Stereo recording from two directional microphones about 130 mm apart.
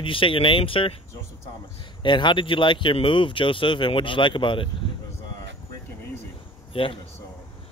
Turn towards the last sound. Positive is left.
turn(degrees=45)  # may be behind; listen again after turning